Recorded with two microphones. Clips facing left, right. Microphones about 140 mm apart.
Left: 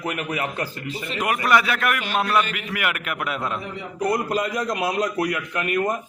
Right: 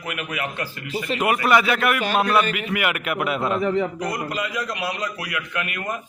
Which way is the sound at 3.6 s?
90° right.